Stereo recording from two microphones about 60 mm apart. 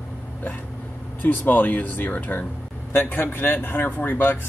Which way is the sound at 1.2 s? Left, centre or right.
Left.